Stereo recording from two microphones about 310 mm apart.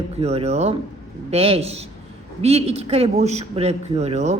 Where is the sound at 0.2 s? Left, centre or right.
Centre.